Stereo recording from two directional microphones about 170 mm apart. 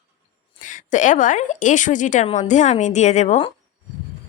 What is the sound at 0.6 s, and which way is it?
A woman's voice, 50° left (ahead or behind).